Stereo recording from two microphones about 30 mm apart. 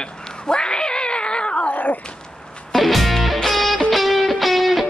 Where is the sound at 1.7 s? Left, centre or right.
Left.